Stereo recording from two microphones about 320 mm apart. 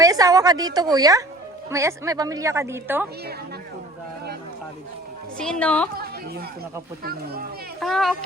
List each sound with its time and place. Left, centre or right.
0.0 s a woman's voice: centre
5.4 s a woman's voice: centre
5.9 s a woman's voice: right
7.8 s a woman's voice: centre